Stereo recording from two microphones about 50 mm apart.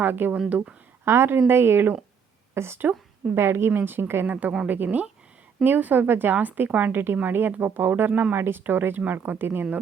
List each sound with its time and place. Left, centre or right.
0.0 s speech: right
1.0 s a woman's voice: right
4.3 s speech: right
6.3 s speech: right